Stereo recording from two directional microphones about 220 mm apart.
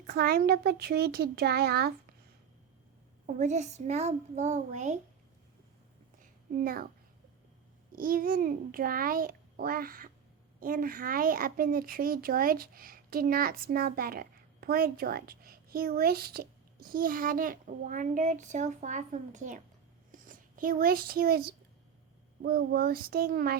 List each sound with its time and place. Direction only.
0.1 s speech: 45° right (ahead or behind)
3.2 s speech: 35° right (ahead or behind)
6.5 s speech: 40° right (ahead or behind)
7.9 s speech: 40° right (ahead or behind)